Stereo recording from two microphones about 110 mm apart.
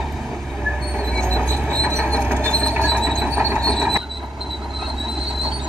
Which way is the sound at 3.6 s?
Centre (ahead or behind).